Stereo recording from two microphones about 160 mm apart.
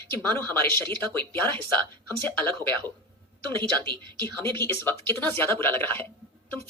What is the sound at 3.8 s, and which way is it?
Speech, 25° right (ahead or behind).